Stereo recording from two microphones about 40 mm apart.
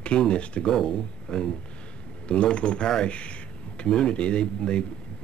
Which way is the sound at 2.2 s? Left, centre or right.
Left.